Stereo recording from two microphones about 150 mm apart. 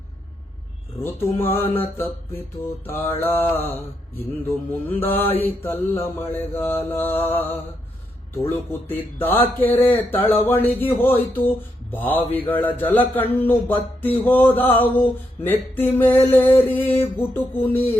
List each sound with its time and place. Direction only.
1.0 s a man's voice: 15° left (ahead or behind)